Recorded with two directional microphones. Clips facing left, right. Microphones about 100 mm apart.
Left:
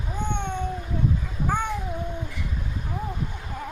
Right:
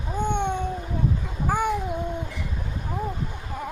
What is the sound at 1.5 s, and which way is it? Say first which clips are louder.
Babbling: right 2 dB; 10° right (ahead or behind).